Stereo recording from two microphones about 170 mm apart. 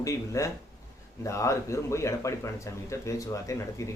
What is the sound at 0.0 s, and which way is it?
A man's voice, 20° left (ahead or behind).